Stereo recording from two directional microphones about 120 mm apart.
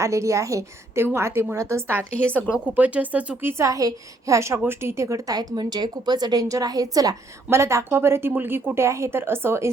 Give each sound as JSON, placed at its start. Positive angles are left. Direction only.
{"t": 0.0, "sound": "a woman's voice", "side_deg": -25}
{"t": 2.1, "sound": "a woman's voice", "side_deg": 10}
{"t": 2.5, "sound": "speech", "side_deg": -15}
{"t": 3.6, "sound": "a woman's voice", "side_deg": -30}